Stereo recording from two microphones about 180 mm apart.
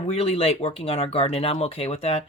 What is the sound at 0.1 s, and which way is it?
Speech, 35° left (ahead or behind).